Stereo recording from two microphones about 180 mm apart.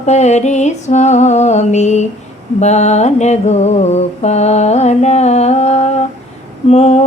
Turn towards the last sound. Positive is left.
turn(degrees=35)  # may be behind; listen again after turning